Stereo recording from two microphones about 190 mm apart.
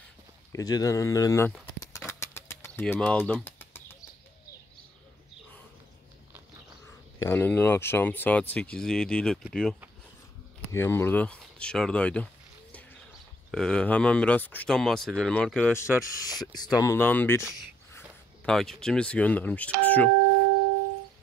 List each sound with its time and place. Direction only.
0.5 s speech: 20° left (ahead or behind)
1.9 s a sound: 15° left (ahead or behind)
2.8 s speech: 5° left (ahead or behind)
7.2 s speech: 10° left (ahead or behind)
10.7 s speech: 15° left (ahead or behind)
13.5 s speech: 5° left (ahead or behind)